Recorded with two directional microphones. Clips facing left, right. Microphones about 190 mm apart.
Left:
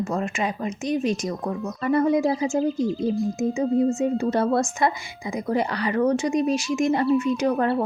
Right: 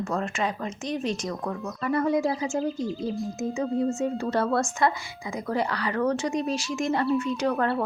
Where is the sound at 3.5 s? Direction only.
15° left (ahead or behind).